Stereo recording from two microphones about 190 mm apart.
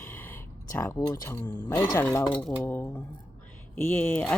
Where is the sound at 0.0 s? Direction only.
10° left (ahead or behind).